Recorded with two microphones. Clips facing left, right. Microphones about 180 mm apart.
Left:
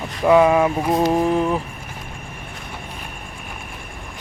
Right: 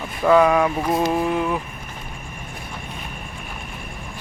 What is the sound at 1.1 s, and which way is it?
Speech, 30° left (ahead or behind).